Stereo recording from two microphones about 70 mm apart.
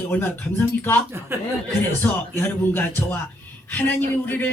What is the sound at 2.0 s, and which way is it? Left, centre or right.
Speech, left.